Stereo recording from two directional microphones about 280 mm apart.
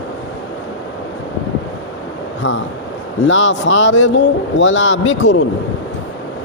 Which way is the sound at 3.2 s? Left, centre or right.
Left.